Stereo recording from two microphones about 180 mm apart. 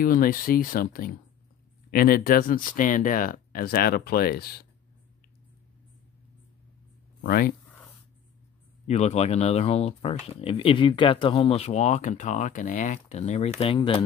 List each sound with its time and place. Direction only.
0.0 s speech: 50° left (ahead or behind)
7.2 s speech: 55° left (ahead or behind)
8.8 s speech: 35° left (ahead or behind)